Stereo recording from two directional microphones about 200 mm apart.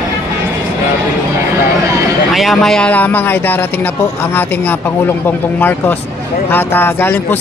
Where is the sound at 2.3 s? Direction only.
Centre (ahead or behind).